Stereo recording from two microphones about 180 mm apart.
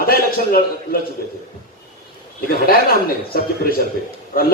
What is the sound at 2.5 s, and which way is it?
A man's voice, 55° left (ahead or behind).